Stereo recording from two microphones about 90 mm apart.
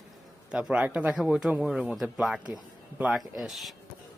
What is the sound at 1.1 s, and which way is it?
Speech, 5° right (ahead or behind).